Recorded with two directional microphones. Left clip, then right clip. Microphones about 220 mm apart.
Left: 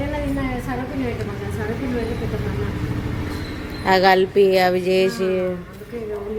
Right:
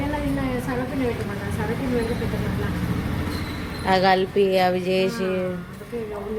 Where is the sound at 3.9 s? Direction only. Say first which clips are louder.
Left 4 dB; 15° left (ahead or behind).